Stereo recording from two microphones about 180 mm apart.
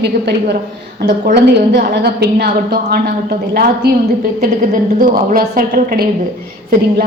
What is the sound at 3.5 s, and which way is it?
Speech, 60° right (ahead or behind).